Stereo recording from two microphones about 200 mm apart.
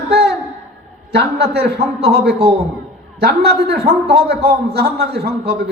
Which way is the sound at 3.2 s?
55° right (ahead or behind).